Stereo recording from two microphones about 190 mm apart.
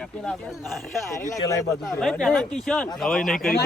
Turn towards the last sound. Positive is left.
turn(degrees=0)  # may be behind; listen again after turning